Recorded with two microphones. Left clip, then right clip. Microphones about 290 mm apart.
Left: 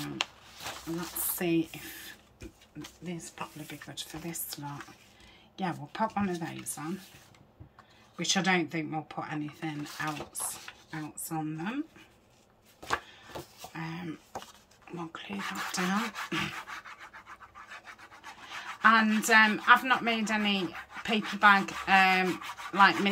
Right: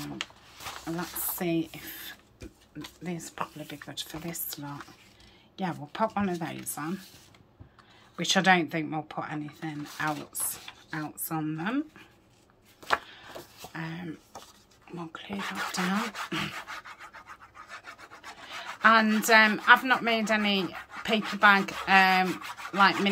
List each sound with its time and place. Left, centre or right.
0.2 s a sound: left
1.4 s speech: centre
8.2 s speech: centre
12.8 s a sound: centre
15.0 s speech: centre
18.6 s speech: centre